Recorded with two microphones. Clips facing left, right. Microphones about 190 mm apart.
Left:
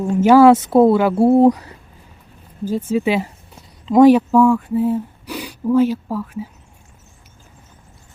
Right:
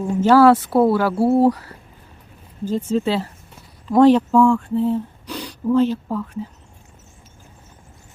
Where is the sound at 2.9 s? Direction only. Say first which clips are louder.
Left 3 dB; 15° left (ahead or behind).